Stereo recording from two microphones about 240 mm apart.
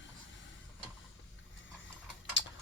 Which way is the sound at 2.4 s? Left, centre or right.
Left.